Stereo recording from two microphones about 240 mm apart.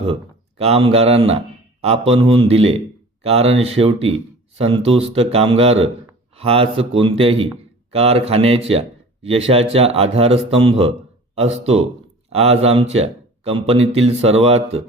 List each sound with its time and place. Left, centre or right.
0.6 s a man's voice: right